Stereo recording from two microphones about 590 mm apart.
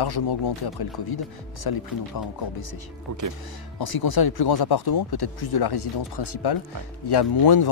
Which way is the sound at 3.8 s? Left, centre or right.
Left.